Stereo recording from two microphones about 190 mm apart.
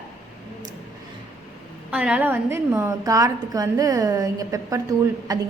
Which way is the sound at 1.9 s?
5° right (ahead or behind).